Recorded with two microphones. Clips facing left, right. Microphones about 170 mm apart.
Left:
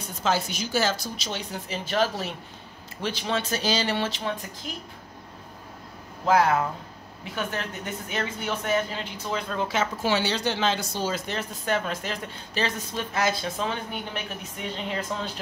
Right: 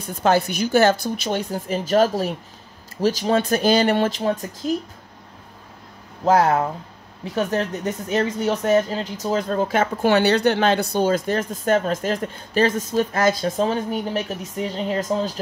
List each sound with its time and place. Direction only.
0.0 s speech: 60° right (ahead or behind); by 4.5 s 40° right (ahead or behind)
6.2 s speech: 40° right (ahead or behind)